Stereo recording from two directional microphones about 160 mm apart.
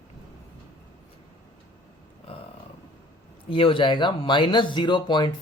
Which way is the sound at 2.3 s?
35° left (ahead or behind).